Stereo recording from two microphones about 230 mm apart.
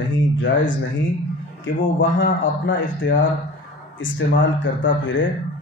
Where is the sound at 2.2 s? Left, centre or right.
Left.